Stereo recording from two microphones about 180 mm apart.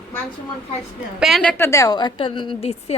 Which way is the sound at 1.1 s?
Centre (ahead or behind).